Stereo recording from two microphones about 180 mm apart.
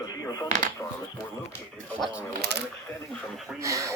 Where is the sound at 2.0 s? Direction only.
5° right (ahead or behind).